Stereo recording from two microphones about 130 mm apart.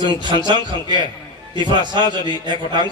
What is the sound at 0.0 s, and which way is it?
A man's voice, 35° right (ahead or behind).